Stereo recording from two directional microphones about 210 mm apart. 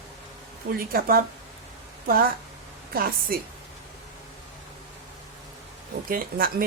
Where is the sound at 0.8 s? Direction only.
45° right (ahead or behind).